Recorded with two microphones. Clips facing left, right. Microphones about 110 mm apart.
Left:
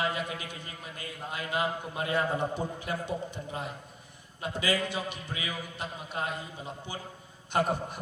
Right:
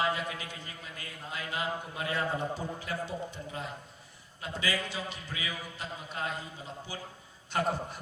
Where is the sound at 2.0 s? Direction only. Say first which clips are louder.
Left 4 dB; 25° left (ahead or behind).